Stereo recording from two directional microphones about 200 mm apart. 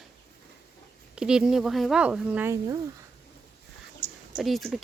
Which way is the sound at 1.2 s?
5° right (ahead or behind).